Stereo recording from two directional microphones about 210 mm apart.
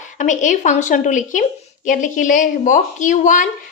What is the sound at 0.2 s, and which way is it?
Speech, 35° left (ahead or behind).